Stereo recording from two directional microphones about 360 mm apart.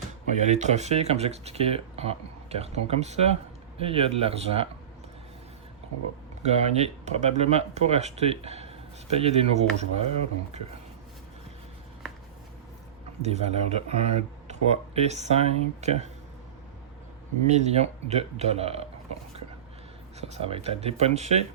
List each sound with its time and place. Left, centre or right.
0.4 s speech: centre
6.4 s speech: centre
13.2 s speech: centre
17.4 s speech: centre
20.3 s speech: centre